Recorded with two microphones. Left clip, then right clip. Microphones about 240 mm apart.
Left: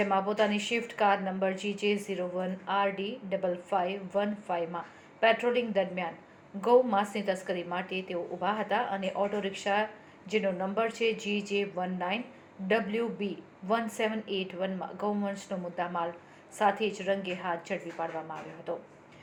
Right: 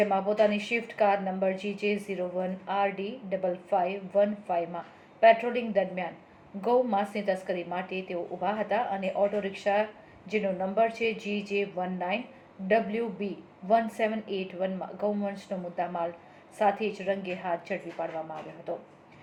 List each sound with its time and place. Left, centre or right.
0.0 s speech: centre